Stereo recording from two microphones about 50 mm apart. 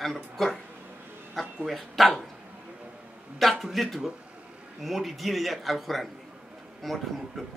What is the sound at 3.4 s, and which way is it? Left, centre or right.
Speech, centre.